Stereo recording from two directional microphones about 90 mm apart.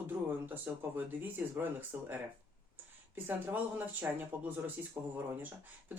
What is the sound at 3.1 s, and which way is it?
Speech, 20° right (ahead or behind).